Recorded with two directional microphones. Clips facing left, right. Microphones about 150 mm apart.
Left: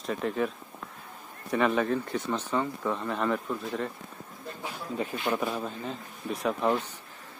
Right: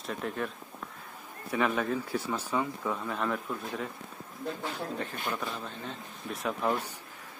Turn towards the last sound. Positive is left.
turn(degrees=0)  # may be behind; listen again after turning